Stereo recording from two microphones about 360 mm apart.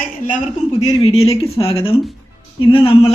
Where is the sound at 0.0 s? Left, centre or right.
Left.